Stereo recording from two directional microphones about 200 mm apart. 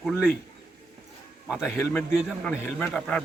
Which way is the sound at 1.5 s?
5° right (ahead or behind).